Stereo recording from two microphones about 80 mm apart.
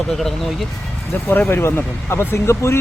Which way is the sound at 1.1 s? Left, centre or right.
Left.